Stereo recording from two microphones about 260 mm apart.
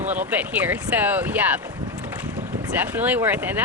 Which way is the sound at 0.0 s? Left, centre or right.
Right.